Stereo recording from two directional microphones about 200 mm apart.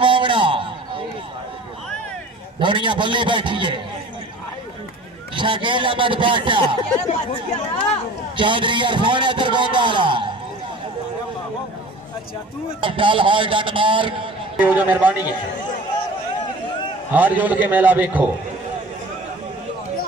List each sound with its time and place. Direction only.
0.0 s a sound: 25° right (ahead or behind)
2.6 s a man's voice: 25° right (ahead or behind)
5.3 s a man's voice: 25° right (ahead or behind)
8.4 s a man's voice: 25° right (ahead or behind)
12.8 s a man's voice: 25° right (ahead or behind)
14.6 s a man's voice: 10° right (ahead or behind)
17.1 s a man's voice: 10° right (ahead or behind)